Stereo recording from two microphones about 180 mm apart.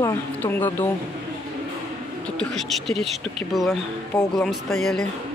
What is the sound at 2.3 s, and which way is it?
Speech, 5° left (ahead or behind).